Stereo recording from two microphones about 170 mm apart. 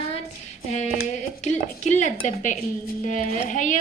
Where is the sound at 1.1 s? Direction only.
45° left (ahead or behind).